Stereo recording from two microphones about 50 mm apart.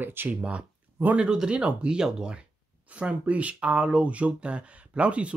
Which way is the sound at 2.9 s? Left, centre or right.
Right.